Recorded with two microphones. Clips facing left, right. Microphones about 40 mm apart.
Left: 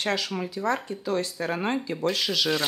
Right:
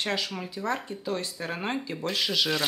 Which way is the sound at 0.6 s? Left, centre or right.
Centre.